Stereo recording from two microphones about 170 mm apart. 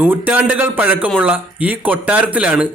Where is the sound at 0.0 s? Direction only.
10° right (ahead or behind).